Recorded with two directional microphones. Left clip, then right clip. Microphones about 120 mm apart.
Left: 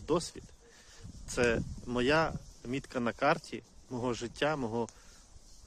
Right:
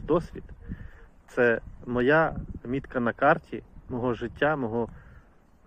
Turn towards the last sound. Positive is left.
turn(degrees=25)  # may be behind; listen again after turning